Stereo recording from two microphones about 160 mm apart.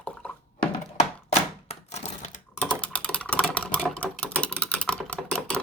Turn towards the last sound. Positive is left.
turn(degrees=5)  # may be behind; listen again after turning